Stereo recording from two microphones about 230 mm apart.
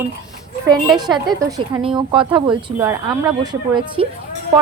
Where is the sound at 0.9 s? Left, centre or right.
Centre.